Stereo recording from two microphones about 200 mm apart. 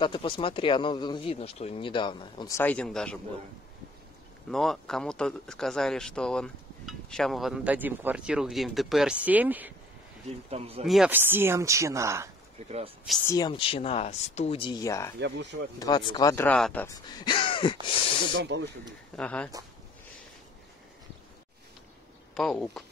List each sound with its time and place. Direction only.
0.0 s speech: 25° left (ahead or behind); by 3.2 s 5° left (ahead or behind)
4.5 s speech: centre (ahead or behind)
10.5 s speech: 30° right (ahead or behind)
10.9 s speech: 5° right (ahead or behind)
13.3 s speech: 20° left (ahead or behind)
15.1 s speech: 60° right (ahead or behind)
15.8 s speech: 20° left (ahead or behind); by 16.8 s 5° left (ahead or behind)
16.8 s speech: 20° left (ahead or behind)
18.3 s speech: 60° right (ahead or behind)
19.1 s speech: 5° left (ahead or behind)
22.3 s speech: centre (ahead or behind)